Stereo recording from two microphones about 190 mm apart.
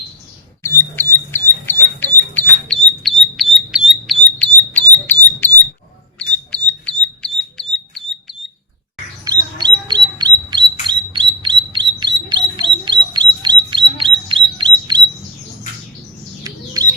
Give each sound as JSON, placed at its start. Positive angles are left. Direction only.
{"t": 0.6, "sound": "a sound", "side_deg": 10}
{"t": 6.1, "sound": "bird", "side_deg": 5}
{"t": 9.2, "sound": "squawk", "side_deg": -20}
{"t": 16.4, "sound": "squawk", "side_deg": -20}